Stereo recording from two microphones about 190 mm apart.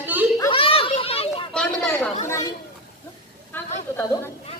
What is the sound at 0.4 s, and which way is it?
Children playing, 30° left (ahead or behind).